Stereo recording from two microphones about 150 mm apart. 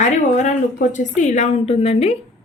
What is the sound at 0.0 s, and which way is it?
A woman's voice, 55° left (ahead or behind).